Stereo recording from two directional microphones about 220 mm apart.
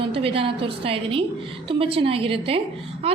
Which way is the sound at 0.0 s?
25° right (ahead or behind).